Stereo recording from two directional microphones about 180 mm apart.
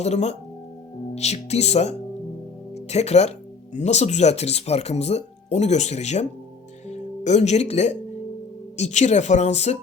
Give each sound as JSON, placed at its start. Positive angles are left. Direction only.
{"t": 0.0, "sound": "speech", "side_deg": 40}